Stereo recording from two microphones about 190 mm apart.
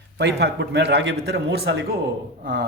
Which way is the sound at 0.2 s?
60° right (ahead or behind).